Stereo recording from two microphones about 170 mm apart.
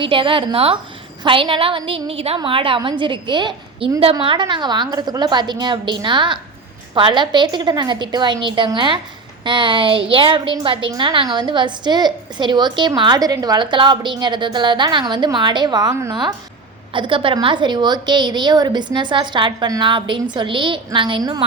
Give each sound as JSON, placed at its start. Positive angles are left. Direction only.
{"t": 0.0, "sound": "a woman's voice", "side_deg": -30}